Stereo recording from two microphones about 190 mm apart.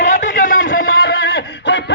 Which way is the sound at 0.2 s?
70° left (ahead or behind).